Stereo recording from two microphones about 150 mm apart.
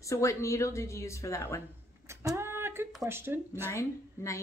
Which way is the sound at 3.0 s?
15° right (ahead or behind).